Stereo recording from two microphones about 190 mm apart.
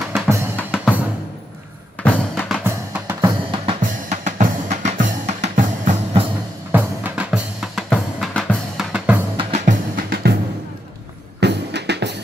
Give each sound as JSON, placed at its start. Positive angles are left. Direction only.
{"t": 0.6, "sound": "drum", "side_deg": 5}
{"t": 2.0, "sound": "drum", "side_deg": 5}
{"t": 2.6, "sound": "drum", "side_deg": -10}
{"t": 3.8, "sound": "drum", "side_deg": -40}
{"t": 6.7, "sound": "drum", "side_deg": -10}
{"t": 9.4, "sound": "drum", "side_deg": -35}
{"t": 9.9, "sound": "drum", "side_deg": -50}
{"t": 11.3, "sound": "music", "side_deg": -65}